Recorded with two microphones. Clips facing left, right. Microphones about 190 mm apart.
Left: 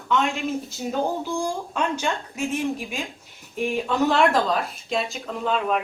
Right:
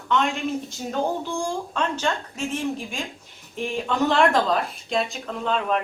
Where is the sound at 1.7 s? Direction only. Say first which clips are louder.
Even; 10° left (ahead or behind).